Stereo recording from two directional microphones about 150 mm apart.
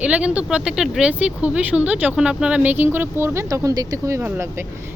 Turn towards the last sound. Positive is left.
turn(degrees=-15)  # may be behind; listen again after turning